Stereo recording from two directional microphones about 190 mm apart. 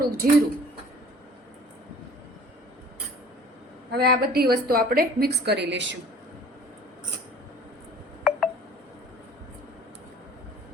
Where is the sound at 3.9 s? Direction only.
55° right (ahead or behind).